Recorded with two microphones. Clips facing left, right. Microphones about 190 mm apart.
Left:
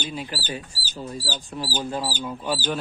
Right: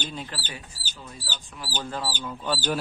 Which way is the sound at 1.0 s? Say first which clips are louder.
Left 9 dB; 35° left (ahead or behind).